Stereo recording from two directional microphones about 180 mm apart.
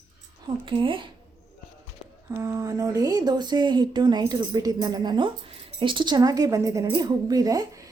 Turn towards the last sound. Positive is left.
turn(degrees=-20)  # may be behind; listen again after turning